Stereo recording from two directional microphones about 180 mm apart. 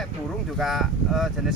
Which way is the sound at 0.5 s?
Centre (ahead or behind).